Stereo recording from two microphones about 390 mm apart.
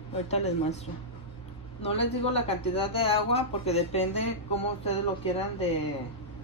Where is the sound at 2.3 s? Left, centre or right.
Centre.